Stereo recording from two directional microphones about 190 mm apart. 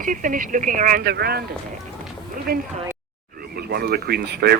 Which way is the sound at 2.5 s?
50° right (ahead or behind).